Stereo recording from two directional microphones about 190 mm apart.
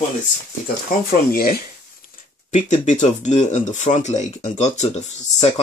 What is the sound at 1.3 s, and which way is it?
Speech, 50° left (ahead or behind).